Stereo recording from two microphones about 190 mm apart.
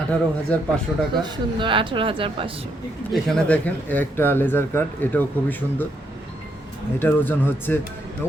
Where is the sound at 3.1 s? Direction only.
5° left (ahead or behind).